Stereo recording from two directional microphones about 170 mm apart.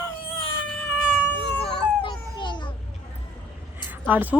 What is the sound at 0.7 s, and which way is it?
Cat, 10° left (ahead or behind).